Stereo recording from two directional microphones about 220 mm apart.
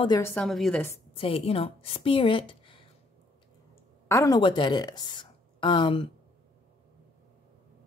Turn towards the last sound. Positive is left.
turn(degrees=20)  # may be behind; listen again after turning